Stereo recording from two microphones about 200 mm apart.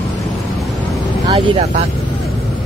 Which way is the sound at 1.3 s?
30° right (ahead or behind).